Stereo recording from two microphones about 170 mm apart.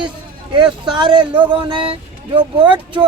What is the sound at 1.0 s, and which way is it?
Speech, 30° right (ahead or behind).